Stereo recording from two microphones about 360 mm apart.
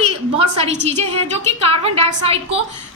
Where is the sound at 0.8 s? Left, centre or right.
Centre.